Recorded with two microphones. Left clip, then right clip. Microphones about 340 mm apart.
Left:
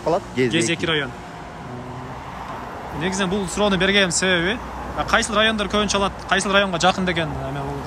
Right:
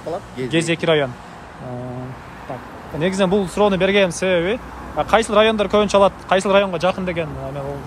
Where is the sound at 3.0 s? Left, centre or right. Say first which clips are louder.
Right 6 dB; centre.